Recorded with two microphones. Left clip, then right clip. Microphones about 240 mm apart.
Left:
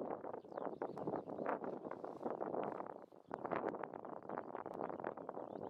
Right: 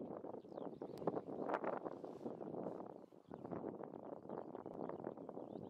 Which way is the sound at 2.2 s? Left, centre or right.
Centre.